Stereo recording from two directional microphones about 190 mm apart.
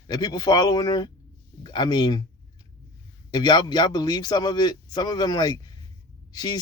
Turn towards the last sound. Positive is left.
turn(degrees=20)  # may be behind; listen again after turning